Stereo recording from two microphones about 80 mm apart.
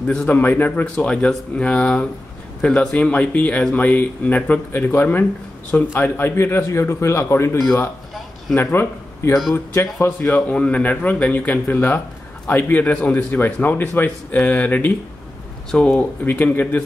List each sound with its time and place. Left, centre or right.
0.0 s a man's voice: centre
0.3 s a man's voice: left
0.9 s a man's voice: centre; by 7.5 s left
8.7 s speech: left
10.0 s a man's voice: left